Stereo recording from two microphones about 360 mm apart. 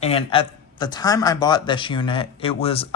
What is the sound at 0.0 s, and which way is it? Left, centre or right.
Speech, centre.